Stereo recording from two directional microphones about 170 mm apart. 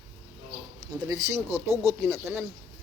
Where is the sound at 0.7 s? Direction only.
20° right (ahead or behind).